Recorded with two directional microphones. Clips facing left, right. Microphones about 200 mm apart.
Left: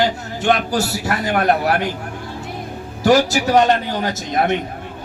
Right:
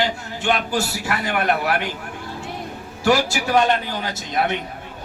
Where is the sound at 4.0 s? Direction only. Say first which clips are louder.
Left 4 dB; 45° left (ahead or behind).